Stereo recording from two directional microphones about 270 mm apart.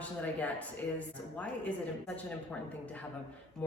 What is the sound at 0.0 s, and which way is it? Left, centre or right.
Speech, centre.